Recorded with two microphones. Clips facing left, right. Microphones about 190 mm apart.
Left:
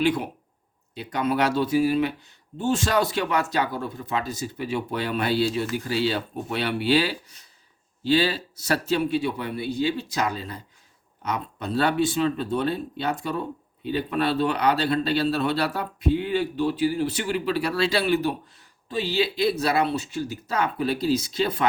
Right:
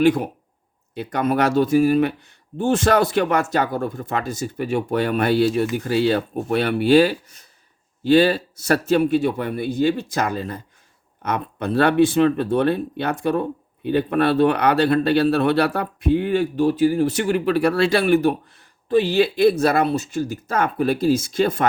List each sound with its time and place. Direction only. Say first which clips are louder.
0.0 s speech: right 6 dB; 45° right (ahead or behind)
11.2 s speech: right 5 dB; 60° right (ahead or behind)